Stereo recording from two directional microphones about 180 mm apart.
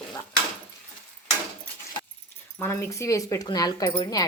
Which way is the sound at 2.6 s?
15° left (ahead or behind).